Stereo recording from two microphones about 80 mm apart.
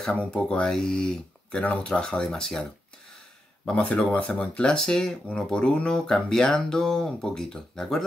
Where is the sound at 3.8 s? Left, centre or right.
Centre.